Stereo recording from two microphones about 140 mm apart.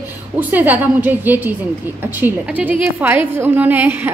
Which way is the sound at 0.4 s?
10° right (ahead or behind).